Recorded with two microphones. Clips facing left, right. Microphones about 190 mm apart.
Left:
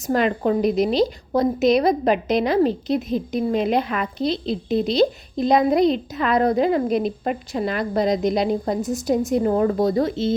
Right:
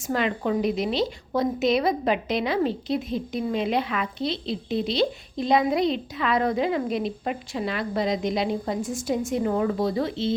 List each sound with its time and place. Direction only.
0.1 s a woman's voice: 45° left (ahead or behind)